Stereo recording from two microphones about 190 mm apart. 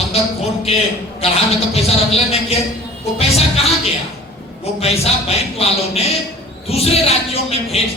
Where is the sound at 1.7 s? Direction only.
30° left (ahead or behind).